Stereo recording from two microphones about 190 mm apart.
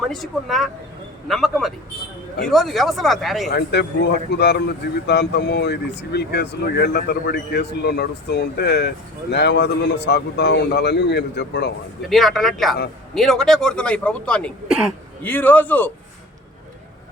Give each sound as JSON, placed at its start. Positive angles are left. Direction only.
{"t": 0.1, "sound": "speech", "side_deg": 0}
{"t": 3.5, "sound": "speech", "side_deg": 60}
{"t": 12.0, "sound": "a man's voice", "side_deg": 0}